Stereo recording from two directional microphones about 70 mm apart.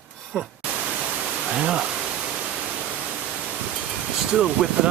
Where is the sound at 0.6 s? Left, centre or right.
Centre.